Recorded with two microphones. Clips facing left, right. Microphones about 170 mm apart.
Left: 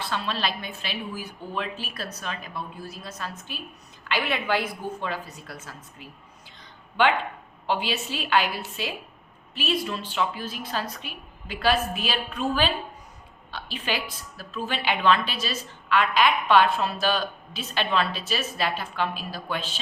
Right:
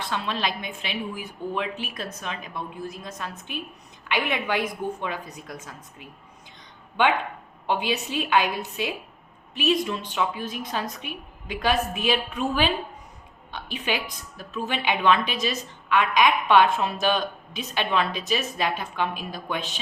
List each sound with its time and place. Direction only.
0.0 s a woman's voice: 15° right (ahead or behind)
7.7 s a woman's voice: 15° right (ahead or behind)